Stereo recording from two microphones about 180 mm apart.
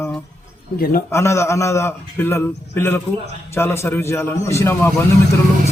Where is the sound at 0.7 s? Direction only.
55° left (ahead or behind).